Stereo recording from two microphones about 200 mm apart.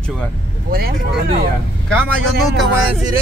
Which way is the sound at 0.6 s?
50° right (ahead or behind).